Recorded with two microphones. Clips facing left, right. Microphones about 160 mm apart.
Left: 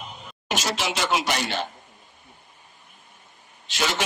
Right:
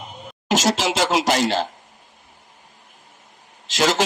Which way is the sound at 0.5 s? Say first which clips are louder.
Right 7 dB; 90° right.